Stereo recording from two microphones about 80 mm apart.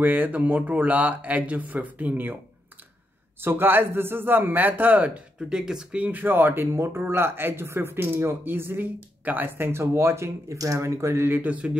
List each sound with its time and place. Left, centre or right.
0.0 s speech: right
3.3 s speech: right
5.5 s speech: centre